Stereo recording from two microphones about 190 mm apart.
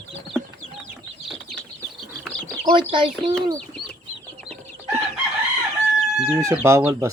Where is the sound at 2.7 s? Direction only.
25° right (ahead or behind).